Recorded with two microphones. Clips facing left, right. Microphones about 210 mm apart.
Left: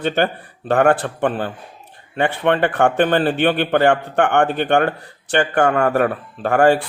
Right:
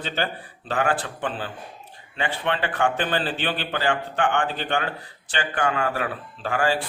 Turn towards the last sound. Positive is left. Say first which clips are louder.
# left 9 dB
turn(degrees=60)  # may be behind; listen again after turning